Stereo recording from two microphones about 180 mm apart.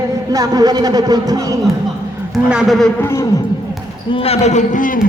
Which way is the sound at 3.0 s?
15° left (ahead or behind).